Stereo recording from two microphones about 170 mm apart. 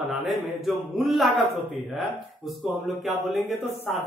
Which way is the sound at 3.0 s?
Centre (ahead or behind).